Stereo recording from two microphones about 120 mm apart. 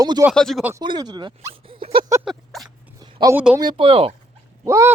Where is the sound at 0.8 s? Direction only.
40° right (ahead or behind).